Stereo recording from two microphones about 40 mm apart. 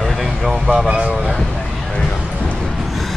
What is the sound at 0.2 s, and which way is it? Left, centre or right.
Speech, centre.